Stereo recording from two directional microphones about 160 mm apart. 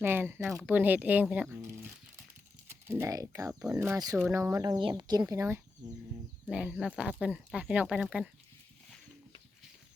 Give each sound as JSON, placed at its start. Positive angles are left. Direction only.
{"t": 0.0, "sound": "speech", "side_deg": -15}